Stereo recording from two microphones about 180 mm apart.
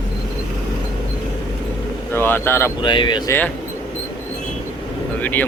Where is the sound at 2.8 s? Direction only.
25° left (ahead or behind).